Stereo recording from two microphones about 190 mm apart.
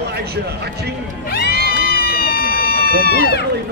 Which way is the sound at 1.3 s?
55° left (ahead or behind).